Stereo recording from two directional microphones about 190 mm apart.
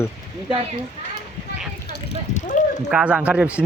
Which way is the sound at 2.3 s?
40° left (ahead or behind).